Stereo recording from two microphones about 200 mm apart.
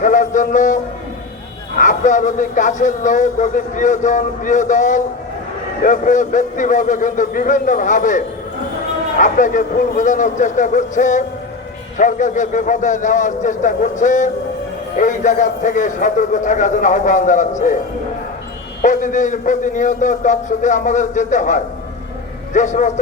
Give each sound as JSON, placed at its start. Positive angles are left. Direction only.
{"t": 0.0, "sound": "a sound", "side_deg": 40}
{"t": 1.8, "sound": "a man's voice", "side_deg": 40}
{"t": 18.8, "sound": "a man's voice", "side_deg": 40}